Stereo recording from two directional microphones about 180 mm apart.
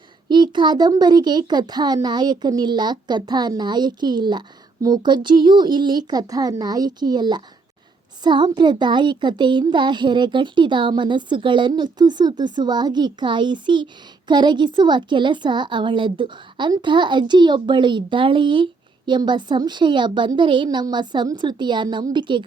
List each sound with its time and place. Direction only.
0.3 s a child's voice: 25° right (ahead or behind)